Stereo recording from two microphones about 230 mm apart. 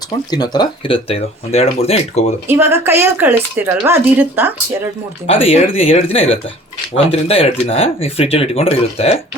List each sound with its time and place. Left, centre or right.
0.3 s speech: centre
2.5 s speech: centre
5.2 s speech: left